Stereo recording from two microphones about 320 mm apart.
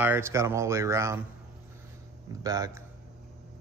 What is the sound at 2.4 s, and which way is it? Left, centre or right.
Speech, centre.